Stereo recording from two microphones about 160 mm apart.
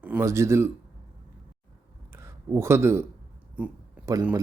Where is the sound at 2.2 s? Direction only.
15° right (ahead or behind).